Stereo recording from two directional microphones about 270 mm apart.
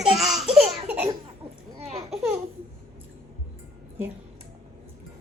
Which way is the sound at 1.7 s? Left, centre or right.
Right.